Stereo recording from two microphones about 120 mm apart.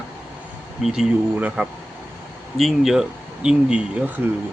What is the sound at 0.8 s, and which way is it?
Speech, 5° right (ahead or behind).